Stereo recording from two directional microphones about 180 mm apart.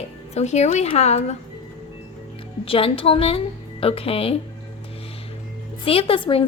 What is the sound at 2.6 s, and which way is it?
A woman's voice, 30° left (ahead or behind).